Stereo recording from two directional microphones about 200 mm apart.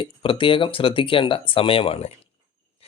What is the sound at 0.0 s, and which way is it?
Speech, 25° left (ahead or behind).